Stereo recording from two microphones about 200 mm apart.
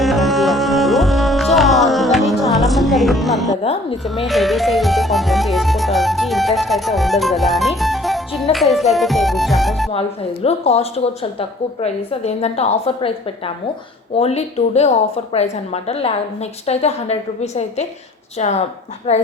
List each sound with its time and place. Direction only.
0.0 s music: centre (ahead or behind)
3.6 s a woman's voice: 30° left (ahead or behind)
4.0 s speech: centre (ahead or behind)
10.4 s a woman's voice: 30° left (ahead or behind)
14.2 s a woman's voice: 30° left (ahead or behind)